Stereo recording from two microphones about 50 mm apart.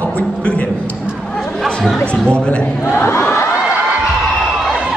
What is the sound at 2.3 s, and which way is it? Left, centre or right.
Speech, left.